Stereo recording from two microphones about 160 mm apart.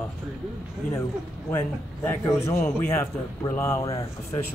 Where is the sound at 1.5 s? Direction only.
15° left (ahead or behind).